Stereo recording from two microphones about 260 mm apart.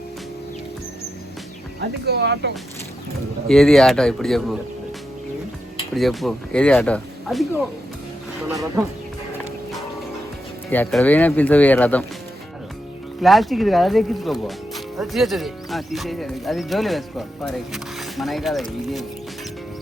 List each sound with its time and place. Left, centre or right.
2.0 s speech: right
3.5 s speech: centre
5.9 s speech: centre
10.7 s speech: centre
13.2 s speech: centre